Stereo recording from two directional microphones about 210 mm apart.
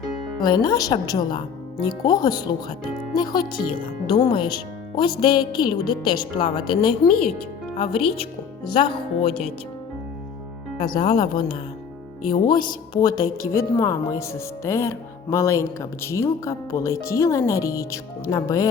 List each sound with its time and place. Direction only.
0.4 s speech: 20° left (ahead or behind)
10.8 s speech: 20° left (ahead or behind)
12.2 s a woman's voice: 40° left (ahead or behind)
13.5 s speech: 10° left (ahead or behind)